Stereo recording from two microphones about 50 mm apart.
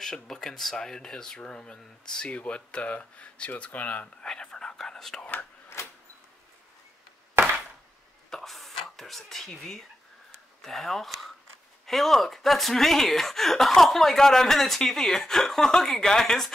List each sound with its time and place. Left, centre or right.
0.0 s speech: centre; by 4.1 s left
4.2 s whispering: centre
5.2 s speech: left
5.7 s a sound: left
8.3 s speech: centre